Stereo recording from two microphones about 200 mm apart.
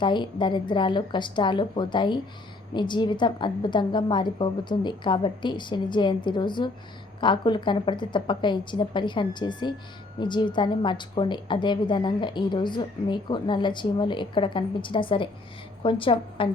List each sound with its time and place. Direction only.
0.0 s a woman's voice: 25° left (ahead or behind)